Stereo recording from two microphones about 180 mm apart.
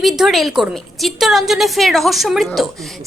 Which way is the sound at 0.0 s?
Centre (ahead or behind).